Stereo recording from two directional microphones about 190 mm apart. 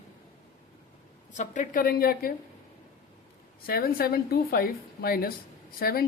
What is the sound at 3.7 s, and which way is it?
Speech, 50° left (ahead or behind).